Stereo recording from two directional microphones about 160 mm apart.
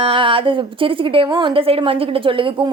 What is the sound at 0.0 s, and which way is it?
A woman's voice, 35° right (ahead or behind).